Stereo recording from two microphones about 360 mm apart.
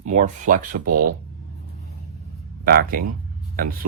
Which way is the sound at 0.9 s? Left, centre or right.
Right.